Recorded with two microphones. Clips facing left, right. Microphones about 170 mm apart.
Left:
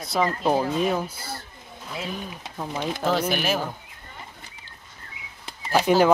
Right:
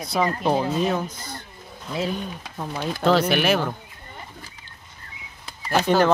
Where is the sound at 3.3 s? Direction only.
65° right (ahead or behind).